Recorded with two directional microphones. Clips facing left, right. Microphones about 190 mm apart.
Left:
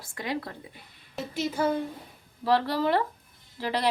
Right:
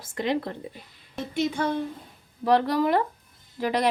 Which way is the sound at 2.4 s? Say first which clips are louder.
Right 3 dB; 20° right (ahead or behind).